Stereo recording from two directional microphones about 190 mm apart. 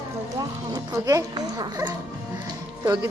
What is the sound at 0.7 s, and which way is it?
Speech, 20° right (ahead or behind).